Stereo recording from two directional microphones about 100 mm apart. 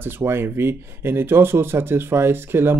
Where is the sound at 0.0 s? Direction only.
25° right (ahead or behind).